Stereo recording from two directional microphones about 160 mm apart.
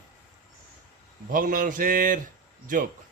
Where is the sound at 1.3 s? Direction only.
60° right (ahead or behind).